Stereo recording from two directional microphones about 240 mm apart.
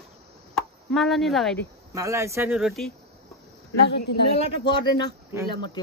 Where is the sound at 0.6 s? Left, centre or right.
Centre.